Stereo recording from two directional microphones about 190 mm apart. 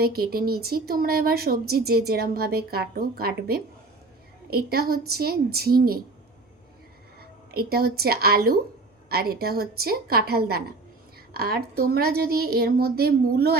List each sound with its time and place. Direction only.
0.0 s speech: 55° right (ahead or behind)
7.2 s a woman's voice: 50° right (ahead or behind)